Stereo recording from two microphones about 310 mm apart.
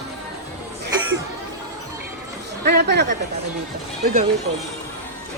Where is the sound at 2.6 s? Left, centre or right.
Right.